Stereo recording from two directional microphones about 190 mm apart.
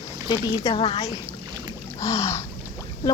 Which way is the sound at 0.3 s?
20° left (ahead or behind).